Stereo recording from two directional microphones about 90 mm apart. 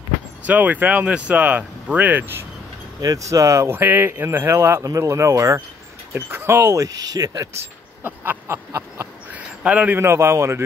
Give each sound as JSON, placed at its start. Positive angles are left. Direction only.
{"t": 0.5, "sound": "speech", "side_deg": -20}
{"t": 3.0, "sound": "speech", "side_deg": -40}
{"t": 3.7, "sound": "speech", "side_deg": -20}
{"t": 8.0, "sound": "a sound", "side_deg": -20}
{"t": 9.6, "sound": "a man's voice", "side_deg": -15}
{"t": 9.9, "sound": "speech", "side_deg": -30}